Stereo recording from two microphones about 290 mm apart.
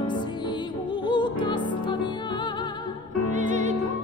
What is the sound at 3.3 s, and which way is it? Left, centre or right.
Music, right.